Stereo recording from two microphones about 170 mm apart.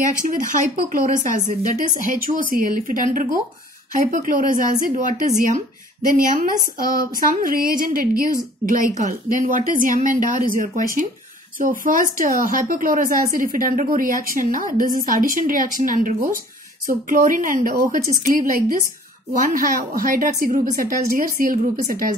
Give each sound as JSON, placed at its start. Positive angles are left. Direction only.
{"t": 0.0, "sound": "a woman's voice", "side_deg": -50}